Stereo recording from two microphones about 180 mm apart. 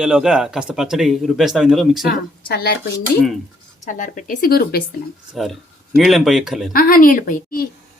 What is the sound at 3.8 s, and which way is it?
Speech, 45° left (ahead or behind).